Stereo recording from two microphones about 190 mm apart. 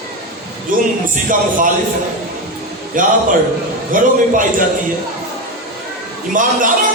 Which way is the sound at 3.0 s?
45° right (ahead or behind).